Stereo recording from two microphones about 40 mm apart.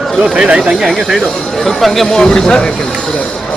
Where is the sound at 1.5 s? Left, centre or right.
Centre.